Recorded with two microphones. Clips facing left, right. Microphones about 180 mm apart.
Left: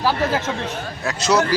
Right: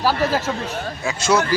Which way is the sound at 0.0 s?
10° right (ahead or behind).